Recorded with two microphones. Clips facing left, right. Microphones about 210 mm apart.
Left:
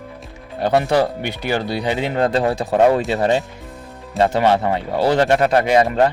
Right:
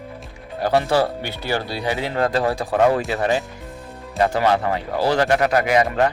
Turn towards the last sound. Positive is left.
turn(degrees=30)  # may be behind; listen again after turning